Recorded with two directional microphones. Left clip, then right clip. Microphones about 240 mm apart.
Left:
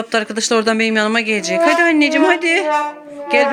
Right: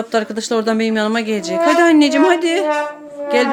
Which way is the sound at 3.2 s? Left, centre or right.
Centre.